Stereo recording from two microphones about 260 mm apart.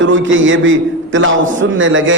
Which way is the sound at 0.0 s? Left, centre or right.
Right.